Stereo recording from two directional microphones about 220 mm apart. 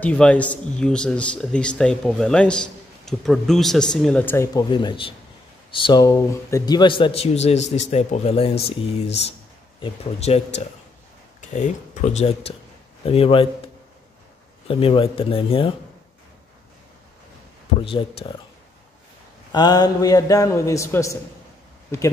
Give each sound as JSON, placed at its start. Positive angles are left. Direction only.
{"t": 0.0, "sound": "speech", "side_deg": 5}
{"t": 9.8, "sound": "speech", "side_deg": 25}
{"t": 14.7, "sound": "speech", "side_deg": 25}
{"t": 17.7, "sound": "speech", "side_deg": 25}
{"t": 19.5, "sound": "a man's voice", "side_deg": 20}